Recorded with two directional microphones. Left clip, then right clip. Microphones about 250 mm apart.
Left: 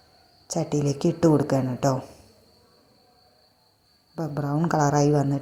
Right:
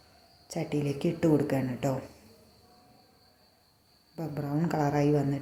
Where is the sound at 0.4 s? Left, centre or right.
Centre.